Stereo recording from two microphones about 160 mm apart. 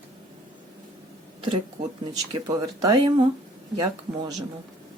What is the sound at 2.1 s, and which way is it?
Speech, 25° right (ahead or behind).